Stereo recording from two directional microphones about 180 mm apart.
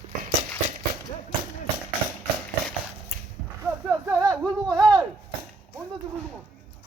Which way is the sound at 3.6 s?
10° right (ahead or behind).